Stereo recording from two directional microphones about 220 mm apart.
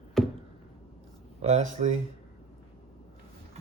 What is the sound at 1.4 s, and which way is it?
Speech, 30° right (ahead or behind).